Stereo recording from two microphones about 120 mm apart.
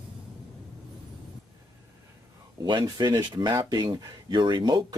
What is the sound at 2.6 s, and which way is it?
Speech, 40° right (ahead or behind).